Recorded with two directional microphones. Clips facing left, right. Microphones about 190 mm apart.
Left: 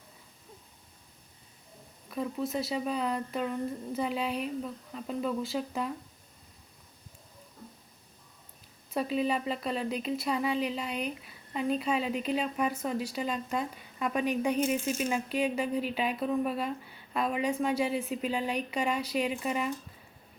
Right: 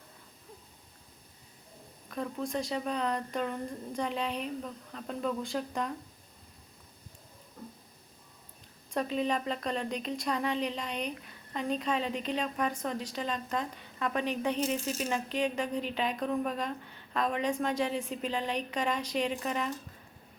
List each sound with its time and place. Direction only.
2.0 s speech: 5° left (ahead or behind)
8.9 s speech: 5° left (ahead or behind)